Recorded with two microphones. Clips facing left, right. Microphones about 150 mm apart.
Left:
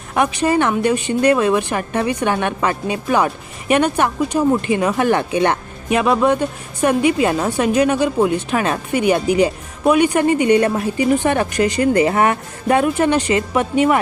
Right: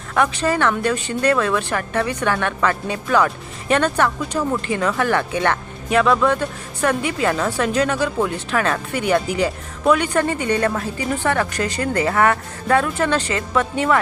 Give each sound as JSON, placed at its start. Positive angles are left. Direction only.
{"t": 0.1, "sound": "a woman's voice", "side_deg": 20}